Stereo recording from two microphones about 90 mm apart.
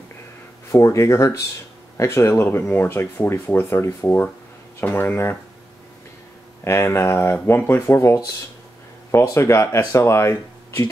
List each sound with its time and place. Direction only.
0.7 s speech: 35° left (ahead or behind)
6.6 s speech: 30° left (ahead or behind)
9.2 s speech: 30° left (ahead or behind)